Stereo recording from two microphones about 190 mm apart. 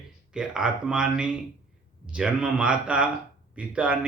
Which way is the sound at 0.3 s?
5° right (ahead or behind).